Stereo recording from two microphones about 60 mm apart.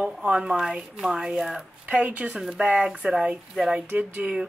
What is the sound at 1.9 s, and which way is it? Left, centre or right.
A woman's voice, right.